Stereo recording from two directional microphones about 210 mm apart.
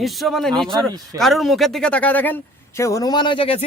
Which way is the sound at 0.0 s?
Centre (ahead or behind).